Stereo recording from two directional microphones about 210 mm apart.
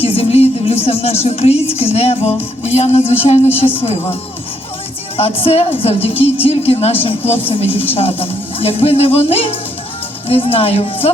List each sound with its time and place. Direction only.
0.0 s a woman's voice: 25° left (ahead or behind)